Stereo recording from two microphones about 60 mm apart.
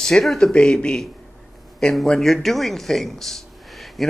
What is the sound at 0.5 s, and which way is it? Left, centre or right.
Speech, centre.